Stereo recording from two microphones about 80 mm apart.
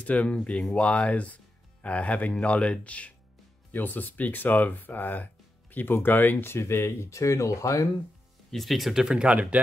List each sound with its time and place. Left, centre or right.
0.0 s speech: centre; by 7.9 s left
8.5 s speech: centre